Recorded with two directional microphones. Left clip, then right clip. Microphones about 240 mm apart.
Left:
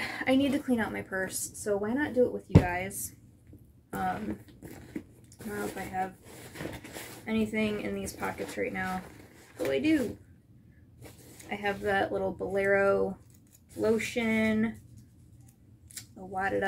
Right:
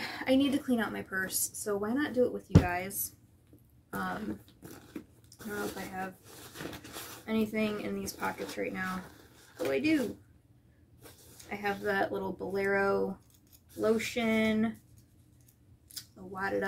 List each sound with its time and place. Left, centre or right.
0.0 s a woman's voice: centre
3.9 s speech: centre
5.4 s a woman's voice: centre
15.9 s scissors: centre